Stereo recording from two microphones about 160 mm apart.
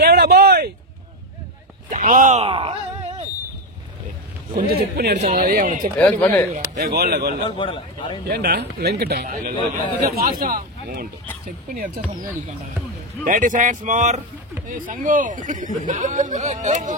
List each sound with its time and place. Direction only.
0.0 s a sound: 90° right
1.9 s speech: 55° right (ahead or behind)
2.4 s a sound: 35° right (ahead or behind)
4.6 s speech: 70° right (ahead or behind)
5.2 s speech: 55° right (ahead or behind)
5.9 s speech: 10° left (ahead or behind)
6.8 s speech: 80° right
7.4 s a man's voice: 30° left (ahead or behind)
8.3 s speech: 80° right
10.0 s speech: 65° right (ahead or behind)
13.2 s speech: 55° right (ahead or behind)